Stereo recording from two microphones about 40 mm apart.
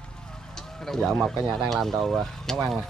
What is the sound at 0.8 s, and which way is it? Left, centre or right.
Speech, centre.